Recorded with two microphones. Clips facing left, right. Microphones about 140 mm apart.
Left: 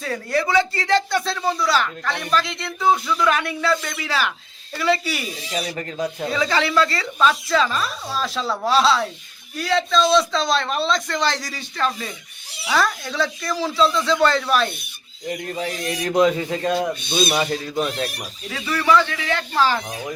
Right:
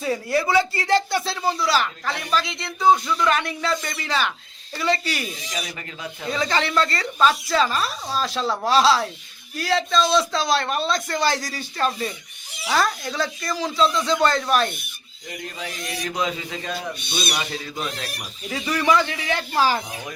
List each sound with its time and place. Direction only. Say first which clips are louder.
0.0 s speech: right 1 dB; 5° right (ahead or behind)
5.5 s speech: left 5 dB; 30° left (ahead or behind)
6.5 s speech: left 1 dB; 5° left (ahead or behind)
12.6 s speech: left 1 dB; centre (ahead or behind)
15.3 s speech: left 7 dB; 45° left (ahead or behind)
18.4 s speech: right 1 dB; 35° right (ahead or behind)
18.8 s speech: left 2 dB; 15° right (ahead or behind)